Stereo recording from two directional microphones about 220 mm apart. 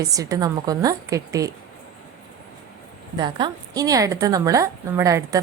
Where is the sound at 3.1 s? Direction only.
20° right (ahead or behind).